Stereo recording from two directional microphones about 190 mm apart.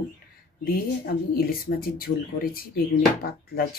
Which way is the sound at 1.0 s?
50° left (ahead or behind).